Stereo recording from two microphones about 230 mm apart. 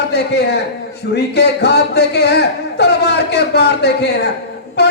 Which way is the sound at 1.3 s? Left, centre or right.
Left.